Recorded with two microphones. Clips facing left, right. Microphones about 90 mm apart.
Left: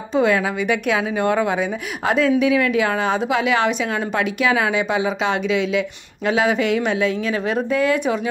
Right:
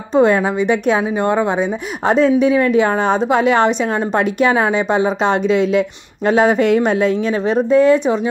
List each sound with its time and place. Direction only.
0.1 s a woman's voice: 35° right (ahead or behind)